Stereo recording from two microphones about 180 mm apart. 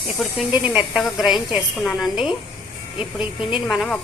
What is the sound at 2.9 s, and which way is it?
Speech, 30° left (ahead or behind).